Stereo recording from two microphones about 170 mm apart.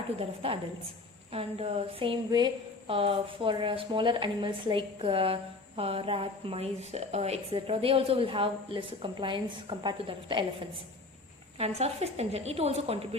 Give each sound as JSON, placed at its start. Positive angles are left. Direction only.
{"t": 0.2, "sound": "a woman's voice", "side_deg": -35}
{"t": 11.6, "sound": "a woman's voice", "side_deg": -35}